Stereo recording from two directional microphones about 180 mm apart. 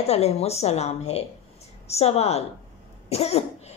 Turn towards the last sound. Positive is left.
turn(degrees=35)  # may be behind; listen again after turning